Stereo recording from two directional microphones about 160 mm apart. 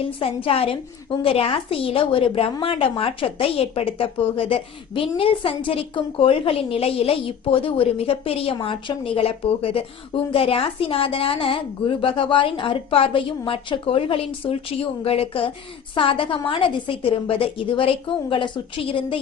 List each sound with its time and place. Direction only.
0.0 s a woman's voice: 35° left (ahead or behind)